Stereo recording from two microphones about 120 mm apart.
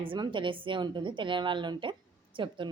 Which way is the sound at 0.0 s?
45° right (ahead or behind).